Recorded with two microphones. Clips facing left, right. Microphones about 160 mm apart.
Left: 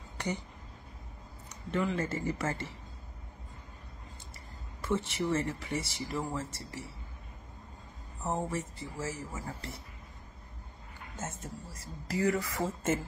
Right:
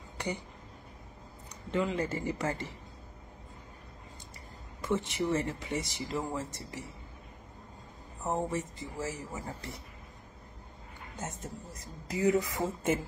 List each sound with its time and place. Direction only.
1.7 s speech: 20° right (ahead or behind)
4.8 s speech: 15° right (ahead or behind)
8.3 s speech: 15° right (ahead or behind)
11.1 s speech: 20° right (ahead or behind)